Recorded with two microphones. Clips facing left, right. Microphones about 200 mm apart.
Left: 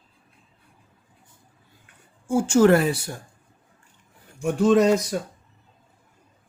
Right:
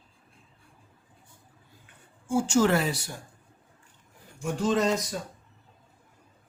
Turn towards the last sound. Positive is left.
turn(degrees=65)  # may be behind; listen again after turning